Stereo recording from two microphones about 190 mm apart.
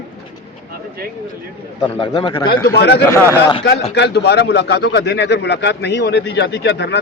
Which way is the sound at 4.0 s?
60° left (ahead or behind).